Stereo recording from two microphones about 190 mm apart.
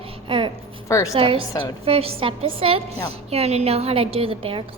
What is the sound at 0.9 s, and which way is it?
Speech, 15° left (ahead or behind).